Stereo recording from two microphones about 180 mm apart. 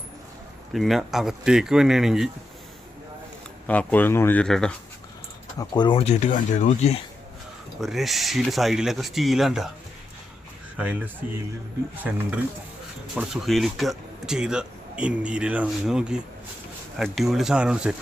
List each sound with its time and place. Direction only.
0.7 s speech: centre (ahead or behind)
3.7 s speech: 10° left (ahead or behind)
5.5 s speech: 25° left (ahead or behind); by 6.9 s 40° left (ahead or behind)
7.8 s speech: centre (ahead or behind)
12.1 s speech: 5° right (ahead or behind)